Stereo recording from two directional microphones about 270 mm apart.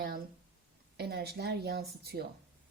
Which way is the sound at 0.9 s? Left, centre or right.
Right.